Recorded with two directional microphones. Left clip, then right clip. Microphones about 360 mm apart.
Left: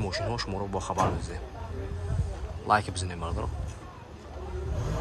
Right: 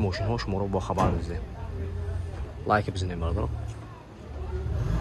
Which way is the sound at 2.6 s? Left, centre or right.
Centre.